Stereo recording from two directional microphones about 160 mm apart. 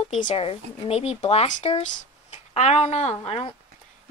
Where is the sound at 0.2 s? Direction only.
40° left (ahead or behind).